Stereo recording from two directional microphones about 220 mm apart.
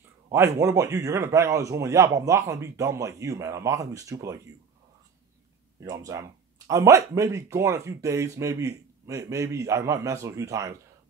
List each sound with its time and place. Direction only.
0.3 s a man's voice: 15° right (ahead or behind)
5.8 s a man's voice: 15° right (ahead or behind)